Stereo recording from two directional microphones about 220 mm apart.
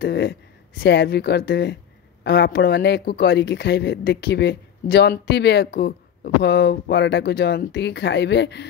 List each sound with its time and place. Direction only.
0.0 s speech: 50° left (ahead or behind)